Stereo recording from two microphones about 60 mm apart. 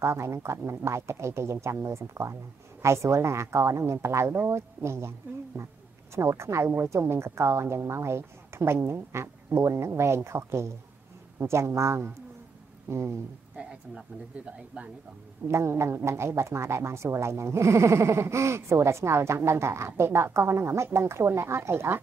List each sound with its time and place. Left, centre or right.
0.0 s speech: right
13.6 s speech: centre
15.4 s speech: right